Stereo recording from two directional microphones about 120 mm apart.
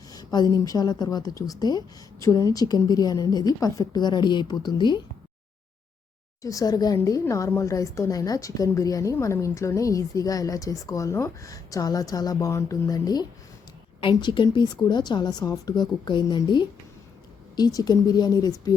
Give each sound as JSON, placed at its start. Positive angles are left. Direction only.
{"t": 0.1, "sound": "a woman's voice", "side_deg": 35}
{"t": 6.4, "sound": "a woman's voice", "side_deg": 30}